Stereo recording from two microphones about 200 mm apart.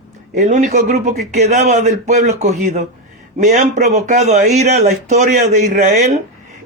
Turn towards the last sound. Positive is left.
turn(degrees=-40)  # may be behind; listen again after turning